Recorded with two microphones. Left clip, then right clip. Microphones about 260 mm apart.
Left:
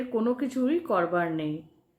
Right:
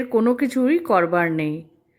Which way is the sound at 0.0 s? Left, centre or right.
Right.